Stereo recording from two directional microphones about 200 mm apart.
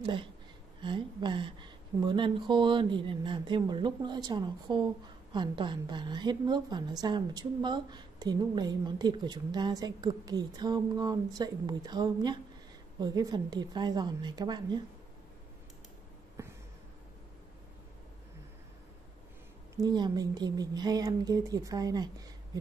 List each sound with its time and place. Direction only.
0.0 s speech: 25° right (ahead or behind)
16.4 s a sound: 15° right (ahead or behind)
19.8 s speech: 20° right (ahead or behind)